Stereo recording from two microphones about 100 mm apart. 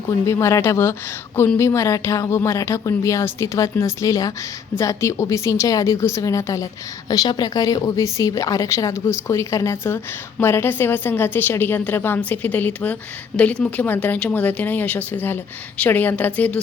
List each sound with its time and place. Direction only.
0.3 s a woman's voice: 30° left (ahead or behind)